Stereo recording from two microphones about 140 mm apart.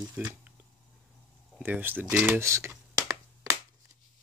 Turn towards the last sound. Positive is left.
turn(degrees=-20)  # may be behind; listen again after turning